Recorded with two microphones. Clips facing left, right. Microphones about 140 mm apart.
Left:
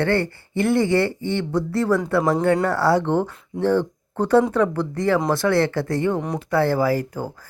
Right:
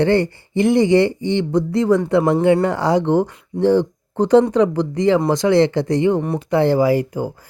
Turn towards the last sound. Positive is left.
turn(degrees=-15)  # may be behind; listen again after turning